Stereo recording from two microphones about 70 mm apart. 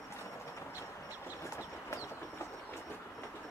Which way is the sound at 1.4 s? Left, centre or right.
Left.